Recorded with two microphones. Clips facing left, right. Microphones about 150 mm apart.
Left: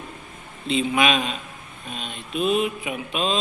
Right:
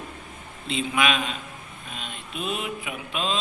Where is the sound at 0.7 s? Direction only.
20° left (ahead or behind).